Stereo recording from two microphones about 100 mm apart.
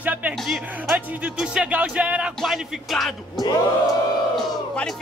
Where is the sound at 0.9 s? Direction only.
10° right (ahead or behind).